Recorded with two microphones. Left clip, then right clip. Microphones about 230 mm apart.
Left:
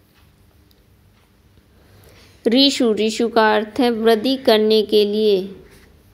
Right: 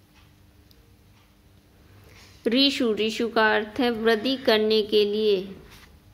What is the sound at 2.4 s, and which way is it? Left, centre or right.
A woman's voice, centre.